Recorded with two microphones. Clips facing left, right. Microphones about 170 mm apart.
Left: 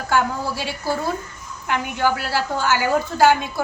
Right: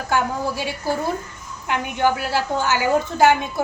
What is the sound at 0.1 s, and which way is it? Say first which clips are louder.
A woman's voice: left 1 dB; 15° right (ahead or behind).